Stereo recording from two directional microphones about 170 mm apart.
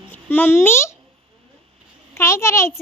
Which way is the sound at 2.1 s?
15° left (ahead or behind).